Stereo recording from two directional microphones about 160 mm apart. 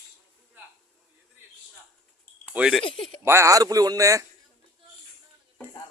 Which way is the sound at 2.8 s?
35° left (ahead or behind).